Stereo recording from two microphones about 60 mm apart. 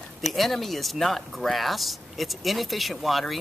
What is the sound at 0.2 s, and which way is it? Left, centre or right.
A man's voice, centre.